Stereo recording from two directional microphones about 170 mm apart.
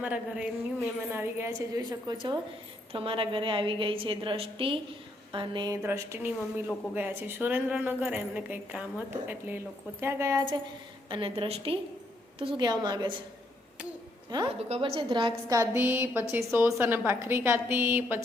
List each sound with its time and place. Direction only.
0.0 s a woman's voice: 10° right (ahead or behind)
11.1 s a woman's voice: 30° right (ahead or behind)
14.3 s a woman's voice: 30° right (ahead or behind); by 18.2 s 15° right (ahead or behind)